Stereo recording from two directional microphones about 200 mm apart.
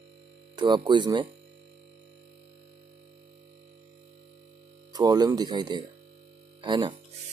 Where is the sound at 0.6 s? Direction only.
25° right (ahead or behind).